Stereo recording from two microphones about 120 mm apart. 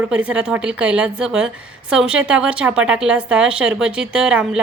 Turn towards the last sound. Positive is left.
turn(degrees=-5)  # may be behind; listen again after turning